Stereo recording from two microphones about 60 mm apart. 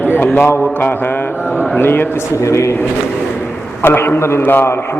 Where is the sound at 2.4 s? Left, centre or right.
Left.